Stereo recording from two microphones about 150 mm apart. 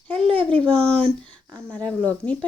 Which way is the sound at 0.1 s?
40° right (ahead or behind).